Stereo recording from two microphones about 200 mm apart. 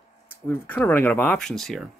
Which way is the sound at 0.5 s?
10° left (ahead or behind).